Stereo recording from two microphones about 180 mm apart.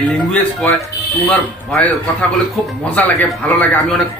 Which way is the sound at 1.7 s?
5° left (ahead or behind).